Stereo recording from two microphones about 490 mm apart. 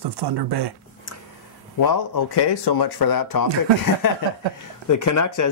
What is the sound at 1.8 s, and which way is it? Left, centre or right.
Speech, left.